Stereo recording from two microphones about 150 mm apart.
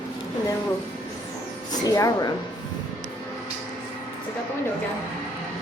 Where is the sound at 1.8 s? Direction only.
25° left (ahead or behind).